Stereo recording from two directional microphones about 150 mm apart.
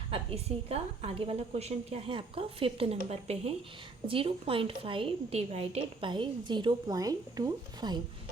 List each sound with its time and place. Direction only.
0.1 s a woman's voice: 40° right (ahead or behind)